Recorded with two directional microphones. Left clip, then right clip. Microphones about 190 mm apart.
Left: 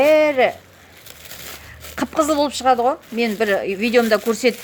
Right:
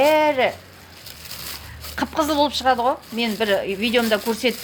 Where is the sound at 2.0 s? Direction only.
55° left (ahead or behind).